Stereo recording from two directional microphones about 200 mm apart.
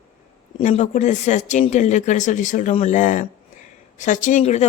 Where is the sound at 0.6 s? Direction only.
35° left (ahead or behind).